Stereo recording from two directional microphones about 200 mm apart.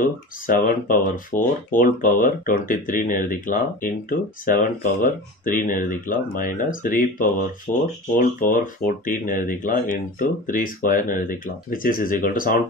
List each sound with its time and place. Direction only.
0.0 s speech: 45° left (ahead or behind)